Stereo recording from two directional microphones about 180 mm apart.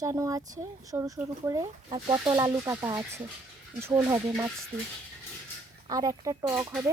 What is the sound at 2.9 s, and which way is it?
Speech, 20° right (ahead or behind).